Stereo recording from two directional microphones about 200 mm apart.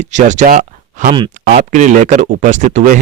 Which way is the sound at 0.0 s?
35° right (ahead or behind).